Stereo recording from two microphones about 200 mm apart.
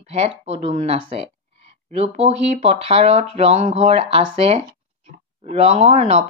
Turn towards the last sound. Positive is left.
turn(degrees=-30)  # may be behind; listen again after turning